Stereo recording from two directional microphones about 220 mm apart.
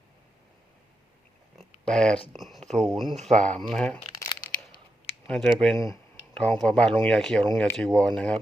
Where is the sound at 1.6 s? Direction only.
5° left (ahead or behind).